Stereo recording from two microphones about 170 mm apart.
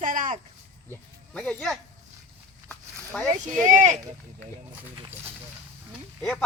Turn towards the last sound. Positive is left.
turn(degrees=5)  # may be behind; listen again after turning